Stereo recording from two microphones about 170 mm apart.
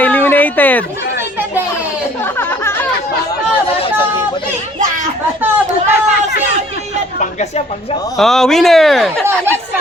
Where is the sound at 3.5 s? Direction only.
35° left (ahead or behind).